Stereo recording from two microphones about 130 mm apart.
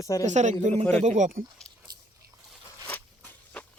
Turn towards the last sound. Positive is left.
turn(degrees=10)  # may be behind; listen again after turning